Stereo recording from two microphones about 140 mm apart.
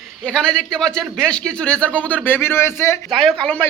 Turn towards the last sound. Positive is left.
turn(degrees=10)  # may be behind; listen again after turning